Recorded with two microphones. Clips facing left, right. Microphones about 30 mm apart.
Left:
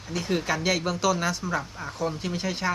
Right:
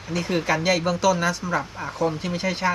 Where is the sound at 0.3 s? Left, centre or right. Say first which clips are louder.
Right 3 dB; centre.